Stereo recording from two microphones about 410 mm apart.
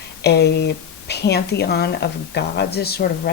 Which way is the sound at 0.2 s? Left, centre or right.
Left.